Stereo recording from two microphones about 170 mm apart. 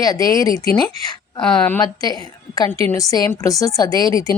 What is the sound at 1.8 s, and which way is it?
A woman's voice, 25° left (ahead or behind).